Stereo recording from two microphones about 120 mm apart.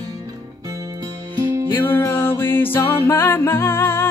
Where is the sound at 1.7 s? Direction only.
20° left (ahead or behind).